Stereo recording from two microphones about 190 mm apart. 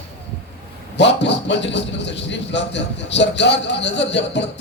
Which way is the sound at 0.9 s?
65° left (ahead or behind).